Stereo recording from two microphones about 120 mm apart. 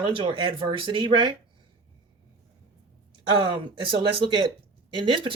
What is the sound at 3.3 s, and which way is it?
Speech, 40° right (ahead or behind).